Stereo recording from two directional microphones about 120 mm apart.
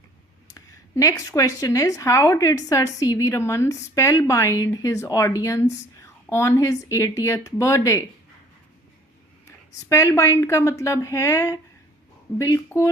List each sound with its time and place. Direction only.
0.5 s speech: 25° left (ahead or behind)
9.9 s speech: 25° left (ahead or behind)